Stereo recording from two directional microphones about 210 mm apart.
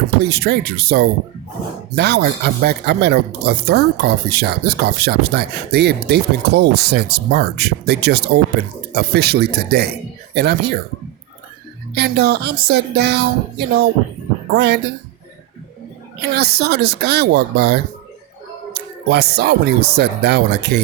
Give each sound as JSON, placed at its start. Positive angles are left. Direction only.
{"t": 0.2, "sound": "speech", "side_deg": -50}
{"t": 11.9, "sound": "speech", "side_deg": -50}
{"t": 16.3, "sound": "speech", "side_deg": -50}